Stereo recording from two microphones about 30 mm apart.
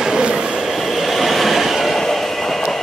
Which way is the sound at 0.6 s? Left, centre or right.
Centre.